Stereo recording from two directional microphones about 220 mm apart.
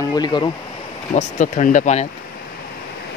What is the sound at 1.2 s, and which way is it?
Speech, 35° left (ahead or behind).